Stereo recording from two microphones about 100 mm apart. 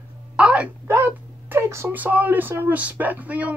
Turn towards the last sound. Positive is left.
turn(degrees=-15)  # may be behind; listen again after turning